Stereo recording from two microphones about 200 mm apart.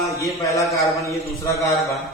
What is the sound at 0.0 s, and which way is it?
A man's voice, 15° left (ahead or behind).